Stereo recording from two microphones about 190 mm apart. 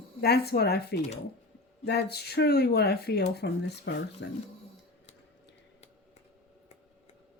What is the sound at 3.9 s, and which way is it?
Speech, 80° left.